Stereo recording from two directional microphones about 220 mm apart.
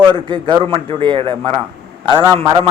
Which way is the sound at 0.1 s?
20° right (ahead or behind).